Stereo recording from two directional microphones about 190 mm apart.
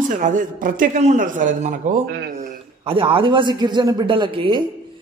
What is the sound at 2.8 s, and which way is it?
A man's voice, 30° right (ahead or behind).